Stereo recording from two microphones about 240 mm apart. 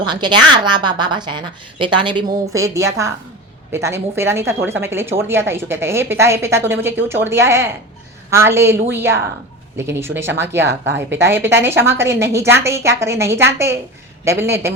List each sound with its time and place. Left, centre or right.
0.1 s a woman's voice: centre